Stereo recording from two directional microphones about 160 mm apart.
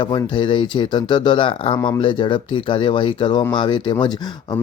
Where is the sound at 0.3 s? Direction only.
30° left (ahead or behind).